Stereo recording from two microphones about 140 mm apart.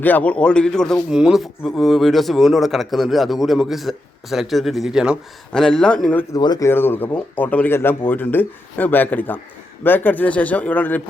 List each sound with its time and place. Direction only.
0.0 s a man's voice: 10° left (ahead or behind)
6.3 s speech: 30° left (ahead or behind)
6.7 s speech: 15° left (ahead or behind)